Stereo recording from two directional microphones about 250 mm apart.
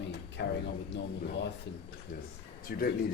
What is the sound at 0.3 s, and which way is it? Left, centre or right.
Speech, left.